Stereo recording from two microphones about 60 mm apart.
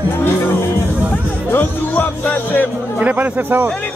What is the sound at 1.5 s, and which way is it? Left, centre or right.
Speech, left.